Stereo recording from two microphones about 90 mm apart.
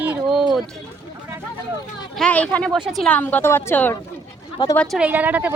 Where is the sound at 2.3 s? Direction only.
15° left (ahead or behind).